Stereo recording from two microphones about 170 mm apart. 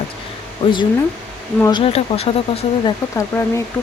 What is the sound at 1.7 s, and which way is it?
Speech, 35° left (ahead or behind).